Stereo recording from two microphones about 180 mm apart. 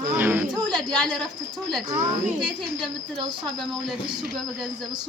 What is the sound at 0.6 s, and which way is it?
Speech, 25° right (ahead or behind).